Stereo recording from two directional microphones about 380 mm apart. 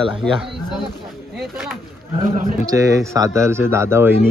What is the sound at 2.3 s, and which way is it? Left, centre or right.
Speech, centre.